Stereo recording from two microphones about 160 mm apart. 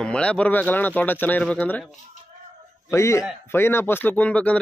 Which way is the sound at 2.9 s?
20° left (ahead or behind).